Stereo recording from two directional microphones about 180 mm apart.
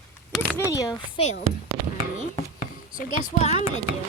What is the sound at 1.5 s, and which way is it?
Speech, 35° right (ahead or behind).